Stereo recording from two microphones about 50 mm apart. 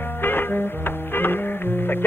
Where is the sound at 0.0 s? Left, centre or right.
Left.